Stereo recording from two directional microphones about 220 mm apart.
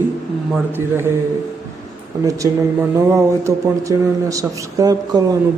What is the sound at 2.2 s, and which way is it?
A man's voice, 15° right (ahead or behind).